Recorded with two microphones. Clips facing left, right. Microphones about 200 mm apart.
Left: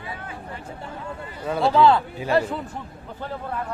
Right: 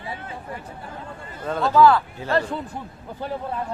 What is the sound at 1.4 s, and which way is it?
Speech, 10° left (ahead or behind).